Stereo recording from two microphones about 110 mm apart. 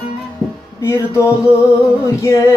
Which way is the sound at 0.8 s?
25° left (ahead or behind).